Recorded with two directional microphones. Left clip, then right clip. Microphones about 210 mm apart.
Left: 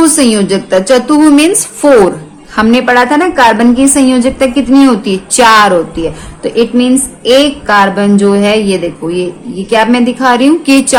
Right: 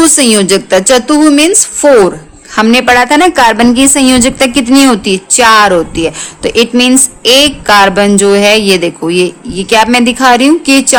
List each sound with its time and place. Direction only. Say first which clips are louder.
0.0 s a woman's voice: right 1 dB; 35° right (ahead or behind)